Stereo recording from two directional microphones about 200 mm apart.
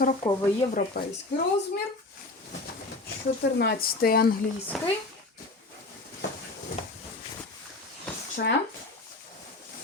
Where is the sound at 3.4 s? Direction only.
55° left (ahead or behind).